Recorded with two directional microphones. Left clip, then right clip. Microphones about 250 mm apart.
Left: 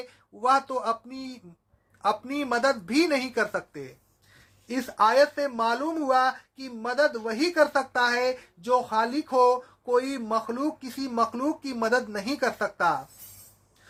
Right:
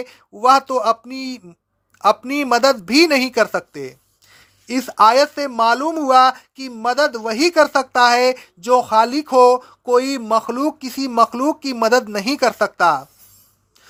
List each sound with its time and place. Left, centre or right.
0.0 s speech: right